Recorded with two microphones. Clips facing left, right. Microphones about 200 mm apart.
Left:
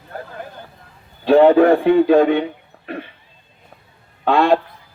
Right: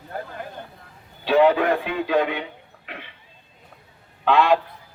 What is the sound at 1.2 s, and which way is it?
A man's voice, 50° left (ahead or behind).